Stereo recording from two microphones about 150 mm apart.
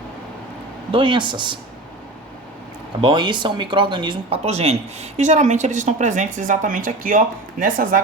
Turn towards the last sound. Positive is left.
turn(degrees=-65)  # may be behind; listen again after turning